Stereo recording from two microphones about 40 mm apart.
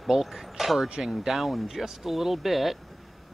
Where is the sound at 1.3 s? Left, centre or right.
Centre.